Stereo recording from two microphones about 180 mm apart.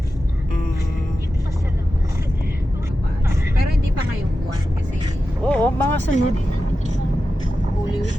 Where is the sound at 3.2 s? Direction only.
15° right (ahead or behind).